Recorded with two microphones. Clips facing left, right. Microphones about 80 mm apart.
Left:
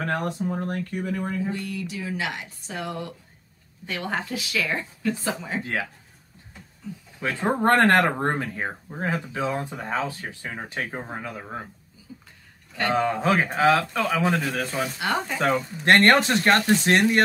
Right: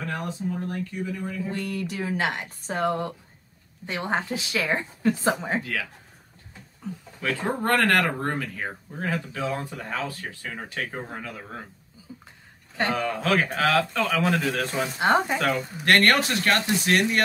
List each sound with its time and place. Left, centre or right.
0.0 s speech: left
1.5 s speech: right
3.8 s a woman's voice: right
5.6 s speech: left
7.2 s speech: centre
12.9 s speech: left; by 14.9 s centre
15.0 s a woman's voice: right
15.3 s speech: centre